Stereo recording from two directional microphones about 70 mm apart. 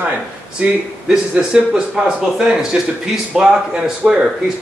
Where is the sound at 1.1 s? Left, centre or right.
Centre.